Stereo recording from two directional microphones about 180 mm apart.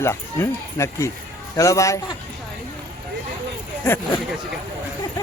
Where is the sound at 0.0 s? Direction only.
15° left (ahead or behind).